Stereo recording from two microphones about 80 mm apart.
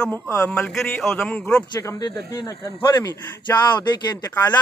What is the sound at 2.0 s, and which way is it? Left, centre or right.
Speech, left.